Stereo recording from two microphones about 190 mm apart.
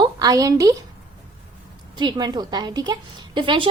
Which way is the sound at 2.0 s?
20° right (ahead or behind).